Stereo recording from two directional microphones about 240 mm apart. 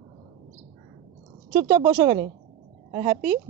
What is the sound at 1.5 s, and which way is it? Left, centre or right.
A woman's voice, centre.